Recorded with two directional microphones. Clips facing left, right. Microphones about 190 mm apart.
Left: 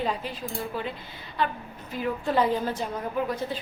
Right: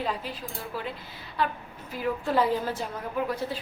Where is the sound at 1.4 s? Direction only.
5° right (ahead or behind).